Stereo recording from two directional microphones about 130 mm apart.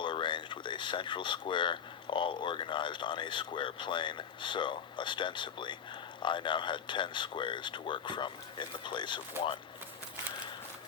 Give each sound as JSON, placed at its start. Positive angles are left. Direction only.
{"t": 0.0, "sound": "speech", "side_deg": 40}